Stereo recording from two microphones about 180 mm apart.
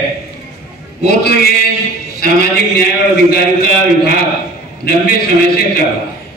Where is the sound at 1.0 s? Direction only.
60° left (ahead or behind).